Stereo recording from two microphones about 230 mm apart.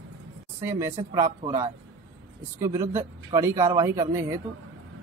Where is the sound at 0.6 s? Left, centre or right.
Centre.